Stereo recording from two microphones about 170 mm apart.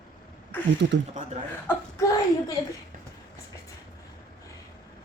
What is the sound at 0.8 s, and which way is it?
Speech, 90° right.